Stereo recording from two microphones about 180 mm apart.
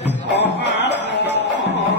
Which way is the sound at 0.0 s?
70° left (ahead or behind).